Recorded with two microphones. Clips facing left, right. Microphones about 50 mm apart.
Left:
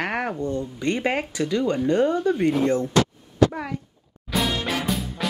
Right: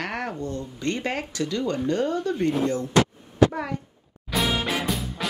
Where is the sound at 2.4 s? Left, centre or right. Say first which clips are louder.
Left 3 dB; left.